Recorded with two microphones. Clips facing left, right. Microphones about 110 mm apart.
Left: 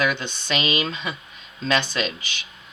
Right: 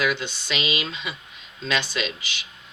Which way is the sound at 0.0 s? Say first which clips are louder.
Left 1 dB; 45° left (ahead or behind).